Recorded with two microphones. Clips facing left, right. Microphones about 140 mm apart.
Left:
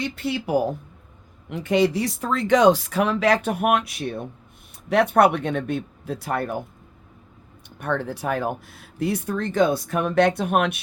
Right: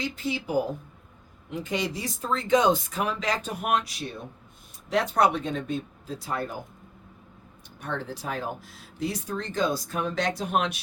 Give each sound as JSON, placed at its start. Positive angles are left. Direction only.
{"t": 0.0, "sound": "speech", "side_deg": 70}
{"t": 7.8, "sound": "speech", "side_deg": 60}